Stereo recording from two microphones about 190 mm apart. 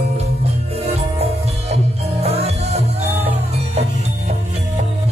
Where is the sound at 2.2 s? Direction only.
35° right (ahead or behind).